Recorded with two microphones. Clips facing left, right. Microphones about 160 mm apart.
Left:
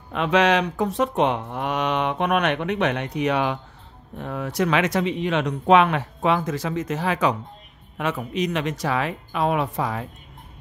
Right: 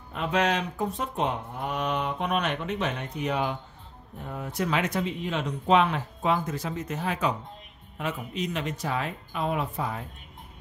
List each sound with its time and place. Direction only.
0.1 s speech: 90° left
8.0 s speech: 75° left (ahead or behind)